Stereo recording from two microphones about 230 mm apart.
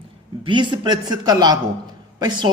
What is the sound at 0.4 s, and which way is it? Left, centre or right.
A man's voice, centre.